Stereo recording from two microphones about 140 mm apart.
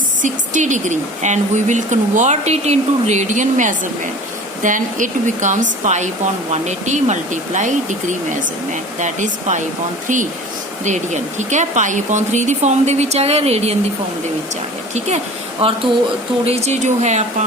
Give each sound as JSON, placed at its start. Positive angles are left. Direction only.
{"t": 0.2, "sound": "speech", "side_deg": -60}
{"t": 10.8, "sound": "speech", "side_deg": -60}
{"t": 14.9, "sound": "speech", "side_deg": -50}